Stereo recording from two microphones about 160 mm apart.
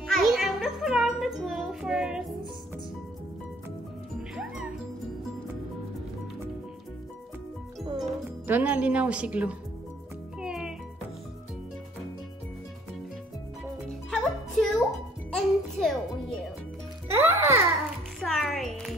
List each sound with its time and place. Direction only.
0.1 s music: centre (ahead or behind)
8.0 s speech: 10° right (ahead or behind)
10.4 s music: 5° right (ahead or behind)
14.1 s music: centre (ahead or behind)
17.1 s music: 15° right (ahead or behind)
18.2 s music: centre (ahead or behind)